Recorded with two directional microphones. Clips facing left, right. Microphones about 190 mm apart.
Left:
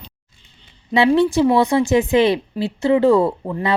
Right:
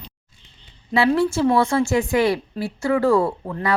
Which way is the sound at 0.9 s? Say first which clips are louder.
Left 3 dB; 15° left (ahead or behind).